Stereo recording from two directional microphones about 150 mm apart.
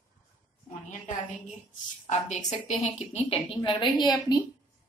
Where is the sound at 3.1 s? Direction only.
40° left (ahead or behind).